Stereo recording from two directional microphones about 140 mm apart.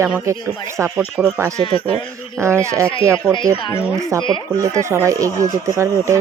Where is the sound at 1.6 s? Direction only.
40° left (ahead or behind).